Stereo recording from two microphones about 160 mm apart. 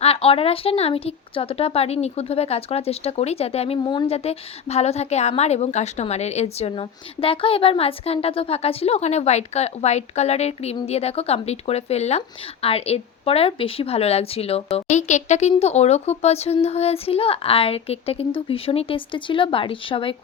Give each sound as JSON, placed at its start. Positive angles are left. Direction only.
{"t": 0.0, "sound": "speech", "side_deg": 40}